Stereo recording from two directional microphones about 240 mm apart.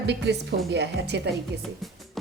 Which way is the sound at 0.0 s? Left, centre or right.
Right.